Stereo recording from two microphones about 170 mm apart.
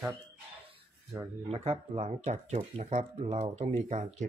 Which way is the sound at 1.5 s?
35° right (ahead or behind).